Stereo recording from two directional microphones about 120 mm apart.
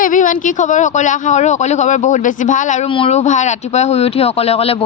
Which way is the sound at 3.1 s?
75° left (ahead or behind).